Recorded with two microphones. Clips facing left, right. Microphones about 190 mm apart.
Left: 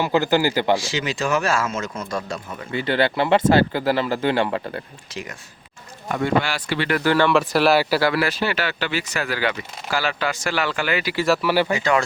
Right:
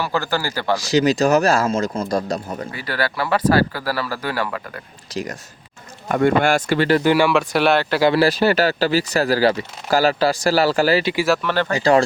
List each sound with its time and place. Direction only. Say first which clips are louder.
0.0 s speech: left 4 dB; 20° left (ahead or behind)
0.8 s speech: right 9 dB; 40° right (ahead or behind)
2.7 s speech: left 6 dB; 25° left (ahead or behind)
5.1 s speech: right 7 dB; 40° right (ahead or behind)
6.1 s speech: right 5 dB; 50° right (ahead or behind)
7.0 s speech: right 2 dB; 15° right (ahead or behind)
7.3 s speech: even; centre (ahead or behind)
8.0 s speech: right 6 dB; 30° right (ahead or behind)
11.3 s speech: left 4 dB; 10° left (ahead or behind)
11.7 s speech: right 5 dB; 35° right (ahead or behind)